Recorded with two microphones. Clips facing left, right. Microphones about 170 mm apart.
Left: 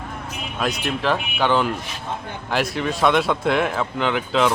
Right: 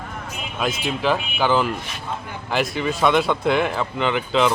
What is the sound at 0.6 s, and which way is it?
Speech, centre (ahead or behind).